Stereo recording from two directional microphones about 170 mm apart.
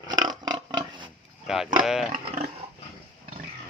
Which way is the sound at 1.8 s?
Centre (ahead or behind).